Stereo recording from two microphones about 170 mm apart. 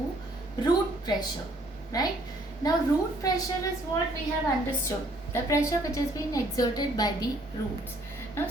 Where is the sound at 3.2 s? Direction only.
20° left (ahead or behind).